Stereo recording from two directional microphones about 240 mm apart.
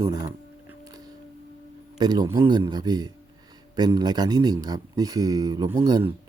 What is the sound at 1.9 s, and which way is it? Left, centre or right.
Speech, centre.